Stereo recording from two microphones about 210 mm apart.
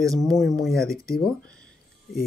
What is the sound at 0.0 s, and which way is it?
Speech, 15° right (ahead or behind).